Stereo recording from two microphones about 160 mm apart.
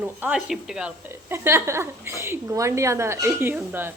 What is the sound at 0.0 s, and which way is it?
A woman's voice, 5° right (ahead or behind).